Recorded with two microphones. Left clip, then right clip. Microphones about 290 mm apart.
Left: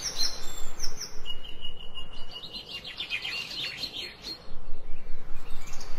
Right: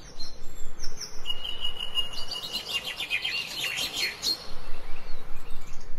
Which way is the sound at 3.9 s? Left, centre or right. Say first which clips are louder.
Right 8 dB; right.